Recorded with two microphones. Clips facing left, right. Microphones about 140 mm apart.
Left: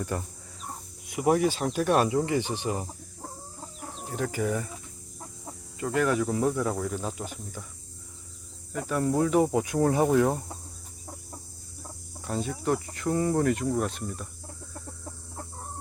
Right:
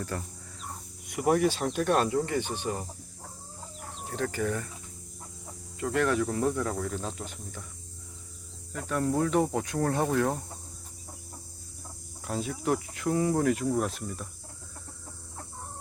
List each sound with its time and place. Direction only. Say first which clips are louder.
0.1 s speech: left 4 dB; 15° left (ahead or behind)
1.1 s speech: left 1 dB; centre (ahead or behind)
4.1 s speech: left 2 dB; 10° left (ahead or behind)
5.8 s speech: left 1 dB; centre (ahead or behind)
8.7 s speech: left 2 dB; 5° left (ahead or behind)
12.2 s speech: left 1 dB; centre (ahead or behind)